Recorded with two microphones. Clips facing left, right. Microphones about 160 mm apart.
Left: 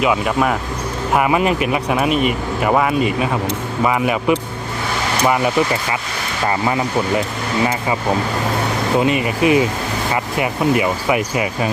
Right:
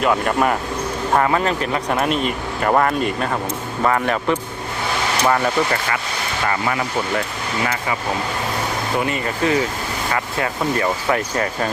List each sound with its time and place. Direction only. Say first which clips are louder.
0.0 s speech: left 1 dB; 5° left (ahead or behind)
1.1 s speech: left 2 dB; 10° left (ahead or behind)
6.5 s speech: left 5 dB; 25° left (ahead or behind)
9.0 s speech: left 5 dB; 20° left (ahead or behind)